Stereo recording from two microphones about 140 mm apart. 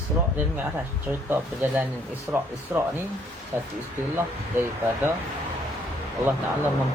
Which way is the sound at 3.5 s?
15° right (ahead or behind).